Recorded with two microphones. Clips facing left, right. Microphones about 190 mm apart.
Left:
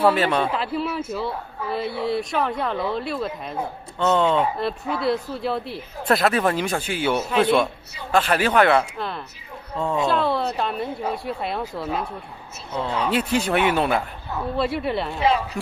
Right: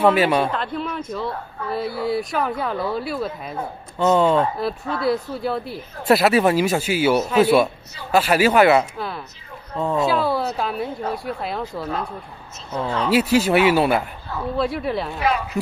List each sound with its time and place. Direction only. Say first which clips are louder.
0.0 s speech: right 2 dB; 10° right (ahead or behind)
0.5 s speech: left 1 dB; 5° left (ahead or behind)
13.1 s speech: right 6 dB; 5° right (ahead or behind)
15.1 s speech: left 3 dB; 25° left (ahead or behind)